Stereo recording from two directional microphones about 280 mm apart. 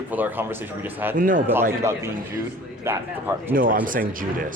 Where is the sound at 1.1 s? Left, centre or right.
Right.